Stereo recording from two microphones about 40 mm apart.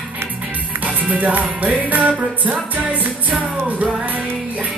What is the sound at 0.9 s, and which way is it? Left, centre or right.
Music, right.